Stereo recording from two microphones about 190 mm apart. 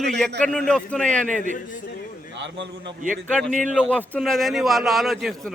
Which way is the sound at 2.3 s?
70° right (ahead or behind).